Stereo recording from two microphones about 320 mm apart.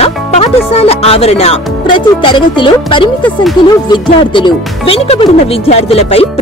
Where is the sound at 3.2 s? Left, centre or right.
Centre.